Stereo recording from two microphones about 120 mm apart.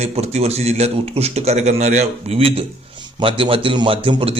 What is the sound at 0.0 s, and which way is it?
A man's voice, 65° right (ahead or behind).